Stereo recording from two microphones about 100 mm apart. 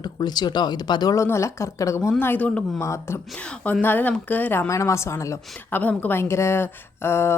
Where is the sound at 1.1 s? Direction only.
30° left (ahead or behind); by 2.7 s 10° left (ahead or behind).